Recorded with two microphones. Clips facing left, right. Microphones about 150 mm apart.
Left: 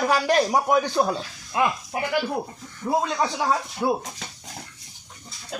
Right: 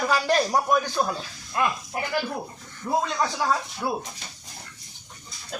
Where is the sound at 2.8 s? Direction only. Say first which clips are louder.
Left 2 dB; 20° left (ahead or behind).